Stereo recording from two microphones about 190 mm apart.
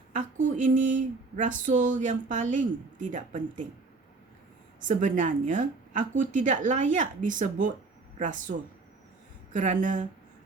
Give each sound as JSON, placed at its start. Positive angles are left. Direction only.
{"t": 0.2, "sound": "speech", "side_deg": -40}
{"t": 4.8, "sound": "speech", "side_deg": -40}